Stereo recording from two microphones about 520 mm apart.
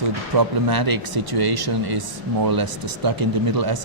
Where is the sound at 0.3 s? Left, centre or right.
Right.